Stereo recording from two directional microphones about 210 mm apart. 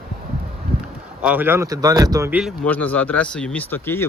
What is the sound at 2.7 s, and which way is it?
Speech, 5° left (ahead or behind).